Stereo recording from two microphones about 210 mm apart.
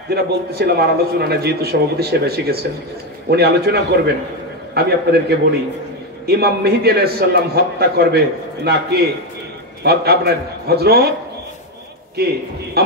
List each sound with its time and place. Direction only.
0.1 s a man's voice: 50° right (ahead or behind)
9.8 s a man's voice: 50° right (ahead or behind)
12.8 s a man's voice: 50° right (ahead or behind)